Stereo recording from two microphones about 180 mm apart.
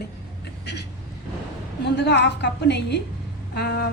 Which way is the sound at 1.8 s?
70° left (ahead or behind).